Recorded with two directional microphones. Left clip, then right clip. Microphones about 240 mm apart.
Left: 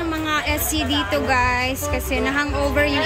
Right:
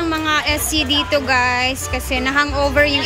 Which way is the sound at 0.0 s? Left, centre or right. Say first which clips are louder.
Right 4 dB; centre.